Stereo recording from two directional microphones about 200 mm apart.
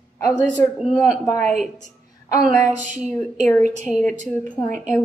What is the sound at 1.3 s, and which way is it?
Speech, 35° right (ahead or behind).